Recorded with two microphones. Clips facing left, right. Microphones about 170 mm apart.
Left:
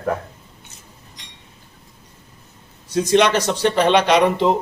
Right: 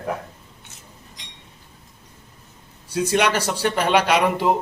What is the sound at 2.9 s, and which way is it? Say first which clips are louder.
Speech: left 4 dB; 10° right (ahead or behind).